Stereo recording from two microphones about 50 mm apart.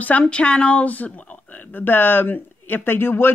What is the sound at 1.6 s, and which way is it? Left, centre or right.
Speech, left.